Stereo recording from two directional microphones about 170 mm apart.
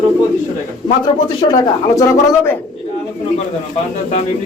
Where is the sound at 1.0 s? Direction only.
25° left (ahead or behind).